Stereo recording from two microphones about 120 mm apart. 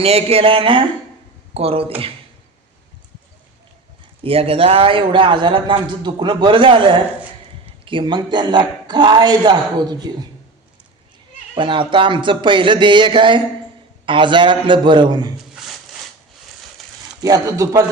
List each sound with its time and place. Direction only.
0.0 s a man's voice: 55° right (ahead or behind)
4.2 s a man's voice: 55° right (ahead or behind); by 10.2 s 35° right (ahead or behind)
11.5 s a man's voice: 45° right (ahead or behind)
15.6 s a sound: 5° right (ahead or behind)
17.2 s speech: 30° right (ahead or behind)